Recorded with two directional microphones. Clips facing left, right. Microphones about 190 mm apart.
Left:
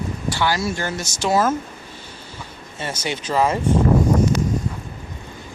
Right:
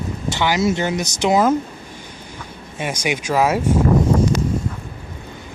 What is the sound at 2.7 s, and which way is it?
Speech, 15° right (ahead or behind).